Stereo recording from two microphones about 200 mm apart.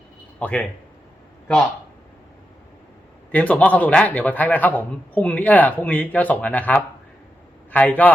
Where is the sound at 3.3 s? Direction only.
5° left (ahead or behind).